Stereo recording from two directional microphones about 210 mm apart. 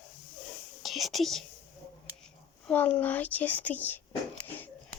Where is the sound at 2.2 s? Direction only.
5° left (ahead or behind).